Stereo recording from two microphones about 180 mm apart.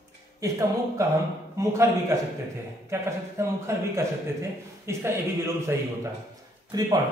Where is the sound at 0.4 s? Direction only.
15° right (ahead or behind).